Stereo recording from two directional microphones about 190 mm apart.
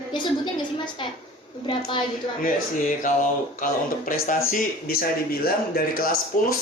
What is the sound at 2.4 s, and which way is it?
Speech, 45° left (ahead or behind).